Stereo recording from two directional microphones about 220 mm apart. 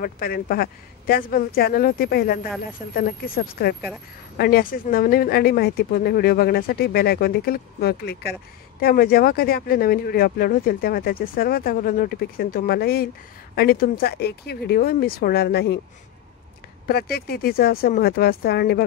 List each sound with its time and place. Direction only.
0.0 s speech: 40° left (ahead or behind)
16.8 s speech: 45° left (ahead or behind)